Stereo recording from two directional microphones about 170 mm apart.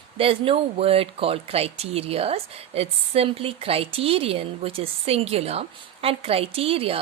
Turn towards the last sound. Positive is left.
turn(degrees=-35)  # may be behind; listen again after turning